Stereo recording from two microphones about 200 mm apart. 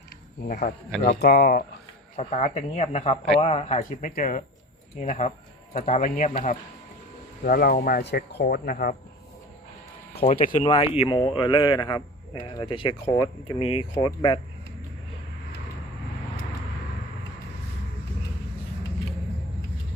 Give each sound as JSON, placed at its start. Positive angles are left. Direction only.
{"t": 0.4, "sound": "speech", "side_deg": 45}
{"t": 2.1, "sound": "speech", "side_deg": 35}
{"t": 10.2, "sound": "speech", "side_deg": 35}
{"t": 10.5, "sound": "speech", "side_deg": 25}